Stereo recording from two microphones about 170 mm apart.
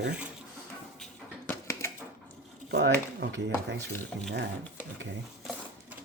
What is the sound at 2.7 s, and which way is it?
Speech, 90° right.